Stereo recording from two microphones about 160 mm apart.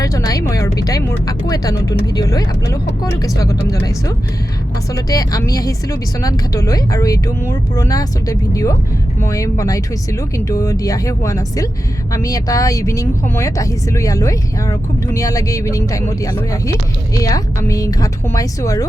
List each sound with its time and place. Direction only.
0.0 s speech: 20° left (ahead or behind)
4.9 s speech: 20° left (ahead or behind)